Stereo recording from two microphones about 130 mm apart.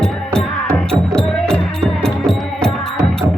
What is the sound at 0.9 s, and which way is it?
Music, 5° left (ahead or behind).